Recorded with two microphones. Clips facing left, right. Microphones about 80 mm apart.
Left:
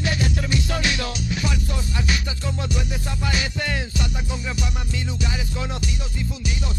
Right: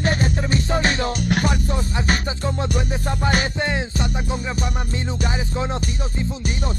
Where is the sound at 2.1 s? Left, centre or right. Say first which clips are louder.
Right 5 dB; right.